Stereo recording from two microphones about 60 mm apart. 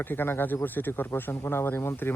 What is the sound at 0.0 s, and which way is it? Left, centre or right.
Speech, left.